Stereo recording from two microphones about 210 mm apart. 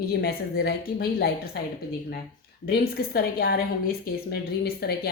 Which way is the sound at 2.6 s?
45° left (ahead or behind).